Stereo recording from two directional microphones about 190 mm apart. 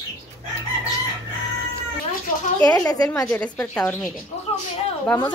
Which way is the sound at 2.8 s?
20° left (ahead or behind).